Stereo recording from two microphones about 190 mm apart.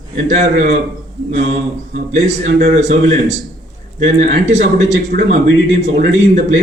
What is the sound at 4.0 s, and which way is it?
Speech, 40° right (ahead or behind).